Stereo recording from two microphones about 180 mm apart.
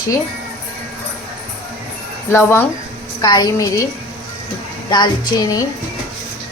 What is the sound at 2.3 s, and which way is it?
Speech, 15° left (ahead or behind).